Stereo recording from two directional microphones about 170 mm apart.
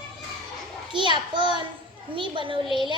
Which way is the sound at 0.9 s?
30° right (ahead or behind).